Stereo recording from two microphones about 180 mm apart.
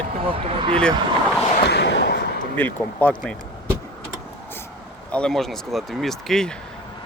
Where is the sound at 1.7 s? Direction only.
70° left (ahead or behind).